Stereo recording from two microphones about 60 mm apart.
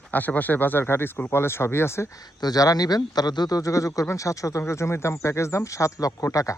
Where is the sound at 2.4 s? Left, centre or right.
Left.